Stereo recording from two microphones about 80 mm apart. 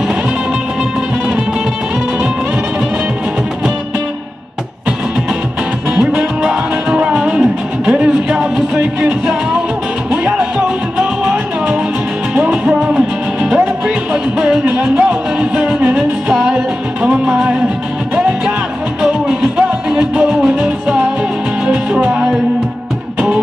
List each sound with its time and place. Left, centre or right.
5.9 s music: centre
12.4 s music: centre
19.2 s music: centre